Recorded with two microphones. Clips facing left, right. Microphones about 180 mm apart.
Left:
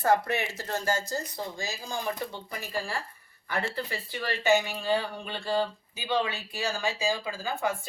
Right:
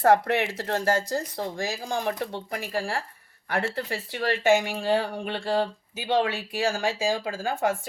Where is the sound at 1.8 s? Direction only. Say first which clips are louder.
Right 3 dB; 80° right.